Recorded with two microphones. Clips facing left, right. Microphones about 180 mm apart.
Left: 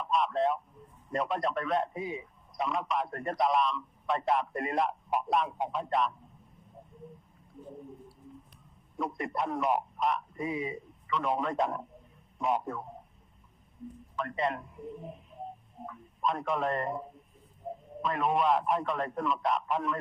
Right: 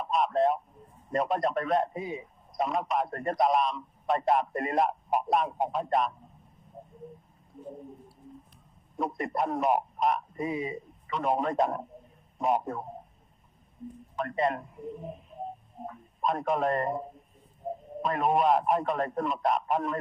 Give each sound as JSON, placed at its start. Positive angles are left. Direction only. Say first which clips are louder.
{"t": 0.0, "sound": "a sound", "louder": "right 3 dB", "side_deg": -45}
{"t": 1.1, "sound": "a man's voice", "louder": "right 3 dB", "side_deg": -45}
{"t": 9.0, "sound": "a man's voice", "louder": "right 3 dB", "side_deg": -40}
{"t": 14.2, "sound": "a man's voice", "louder": "right 3 dB", "side_deg": -45}
{"t": 15.9, "sound": "a man's voice", "louder": "right 2 dB", "side_deg": -45}